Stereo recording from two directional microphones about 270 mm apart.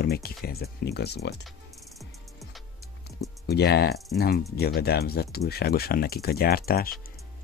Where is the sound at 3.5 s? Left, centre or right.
Left.